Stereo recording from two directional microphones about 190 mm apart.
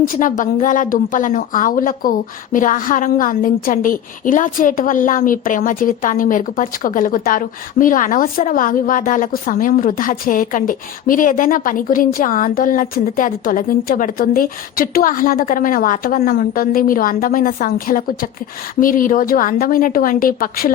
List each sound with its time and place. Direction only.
0.1 s a woman's voice: 45° left (ahead or behind)